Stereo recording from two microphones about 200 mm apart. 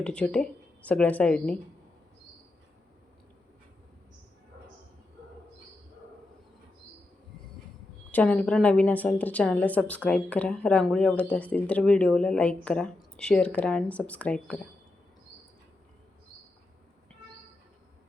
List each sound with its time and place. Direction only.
0.0 s speech: 5° left (ahead or behind)
8.1 s a woman's voice: 5° left (ahead or behind)